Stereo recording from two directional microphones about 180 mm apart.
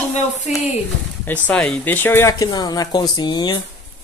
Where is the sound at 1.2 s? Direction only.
10° left (ahead or behind); by 3.5 s 25° left (ahead or behind).